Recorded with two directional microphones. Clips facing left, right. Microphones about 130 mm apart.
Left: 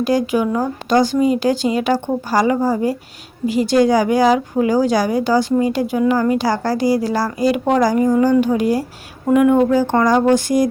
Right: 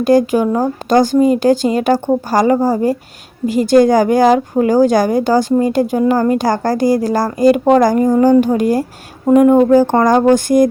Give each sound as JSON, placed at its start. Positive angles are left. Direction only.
{"t": 0.0, "sound": "speech", "side_deg": -45}